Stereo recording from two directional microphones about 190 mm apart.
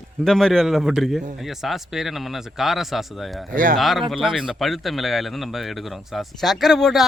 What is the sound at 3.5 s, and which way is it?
Speech, 45° right (ahead or behind).